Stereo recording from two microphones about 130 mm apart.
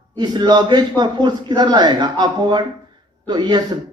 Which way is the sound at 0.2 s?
35° right (ahead or behind).